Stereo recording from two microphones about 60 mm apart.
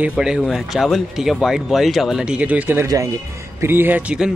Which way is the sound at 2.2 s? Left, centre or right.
Centre.